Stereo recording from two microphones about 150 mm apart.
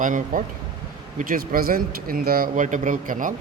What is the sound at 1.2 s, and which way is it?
Speech, 70° right (ahead or behind).